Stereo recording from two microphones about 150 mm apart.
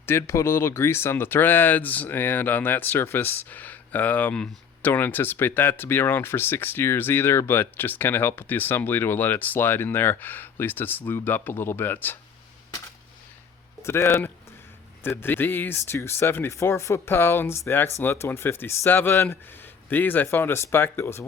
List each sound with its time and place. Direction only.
0.0 s speech: 15° left (ahead or behind)
13.8 s speech: 15° left (ahead or behind)